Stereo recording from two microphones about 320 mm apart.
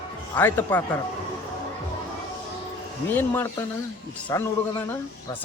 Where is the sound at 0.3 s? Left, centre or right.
Centre.